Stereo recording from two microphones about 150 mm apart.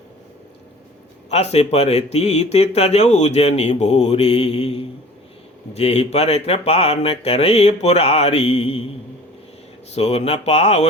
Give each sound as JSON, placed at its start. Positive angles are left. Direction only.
{"t": 1.3, "sound": "speech", "side_deg": 45}
{"t": 9.9, "sound": "speech", "side_deg": 45}